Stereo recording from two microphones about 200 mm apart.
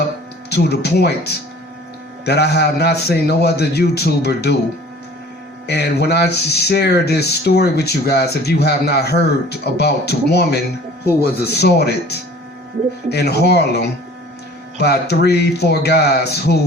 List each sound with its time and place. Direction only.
0.5 s a man's voice: 55° left (ahead or behind)
5.6 s speech: 55° left (ahead or behind)